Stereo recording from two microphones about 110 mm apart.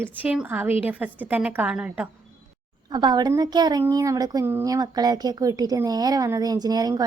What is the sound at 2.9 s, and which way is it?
Speech, 40° right (ahead or behind).